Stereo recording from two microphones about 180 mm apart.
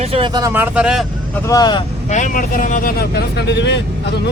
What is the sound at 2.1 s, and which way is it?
Speech, 45° left (ahead or behind).